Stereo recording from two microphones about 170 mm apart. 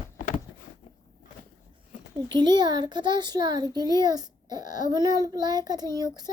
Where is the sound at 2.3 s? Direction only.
25° right (ahead or behind).